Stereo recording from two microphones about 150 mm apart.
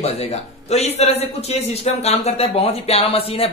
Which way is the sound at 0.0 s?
45° left (ahead or behind).